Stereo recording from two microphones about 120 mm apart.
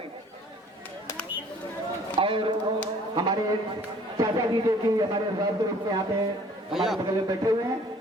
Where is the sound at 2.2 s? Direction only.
45° right (ahead or behind).